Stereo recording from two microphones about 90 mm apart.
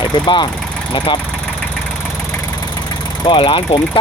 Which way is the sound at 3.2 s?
70° left (ahead or behind).